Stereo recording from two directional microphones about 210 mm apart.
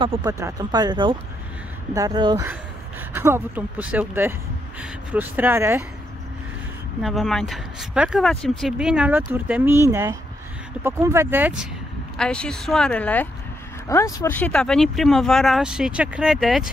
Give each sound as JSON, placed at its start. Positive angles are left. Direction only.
{"t": 0.0, "sound": "speech", "side_deg": -20}
{"t": 7.0, "sound": "speech", "side_deg": 0}
{"t": 12.2, "sound": "speech", "side_deg": 5}